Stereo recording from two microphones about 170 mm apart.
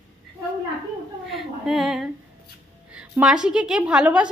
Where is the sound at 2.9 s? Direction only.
5° right (ahead or behind).